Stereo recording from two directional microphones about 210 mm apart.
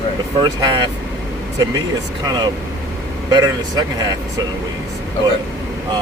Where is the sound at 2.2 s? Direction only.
20° right (ahead or behind).